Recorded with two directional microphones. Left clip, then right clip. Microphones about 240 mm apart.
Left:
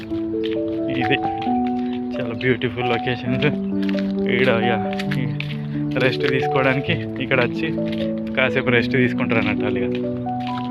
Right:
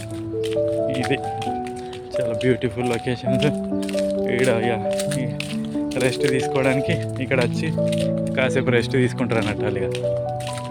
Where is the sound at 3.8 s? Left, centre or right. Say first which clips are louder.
Right 3 dB; right.